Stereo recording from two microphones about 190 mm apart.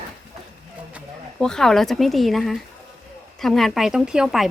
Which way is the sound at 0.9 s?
5° left (ahead or behind).